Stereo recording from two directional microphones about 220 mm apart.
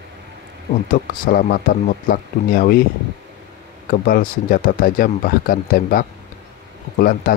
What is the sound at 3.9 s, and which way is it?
Speech, 40° left (ahead or behind).